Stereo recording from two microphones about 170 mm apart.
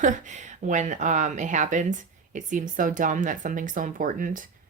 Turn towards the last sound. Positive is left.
turn(degrees=-50)  # may be behind; listen again after turning